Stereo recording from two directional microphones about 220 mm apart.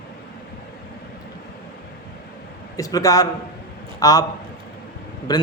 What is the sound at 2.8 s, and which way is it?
A man's voice, 15° left (ahead or behind).